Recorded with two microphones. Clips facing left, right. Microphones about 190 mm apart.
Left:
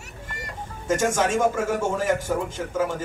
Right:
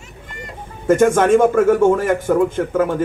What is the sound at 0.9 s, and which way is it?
A man's voice, 60° right (ahead or behind).